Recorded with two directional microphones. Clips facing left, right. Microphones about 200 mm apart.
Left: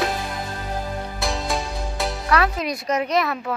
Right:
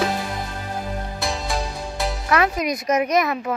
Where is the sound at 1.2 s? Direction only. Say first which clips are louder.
Left 1 dB; centre (ahead or behind).